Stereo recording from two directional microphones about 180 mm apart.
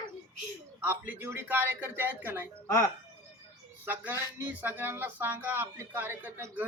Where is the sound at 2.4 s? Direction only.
20° left (ahead or behind).